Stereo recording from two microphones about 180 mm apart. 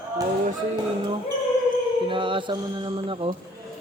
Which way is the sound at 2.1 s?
25° right (ahead or behind).